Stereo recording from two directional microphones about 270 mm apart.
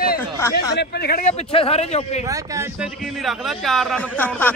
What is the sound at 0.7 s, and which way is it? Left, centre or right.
A man's voice, left.